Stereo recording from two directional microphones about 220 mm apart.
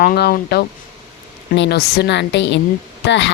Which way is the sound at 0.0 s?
45° left (ahead or behind).